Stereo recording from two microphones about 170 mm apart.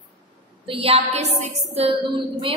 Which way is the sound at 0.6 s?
35° right (ahead or behind).